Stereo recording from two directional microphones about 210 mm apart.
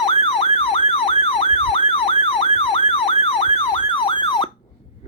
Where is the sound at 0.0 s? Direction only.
25° left (ahead or behind).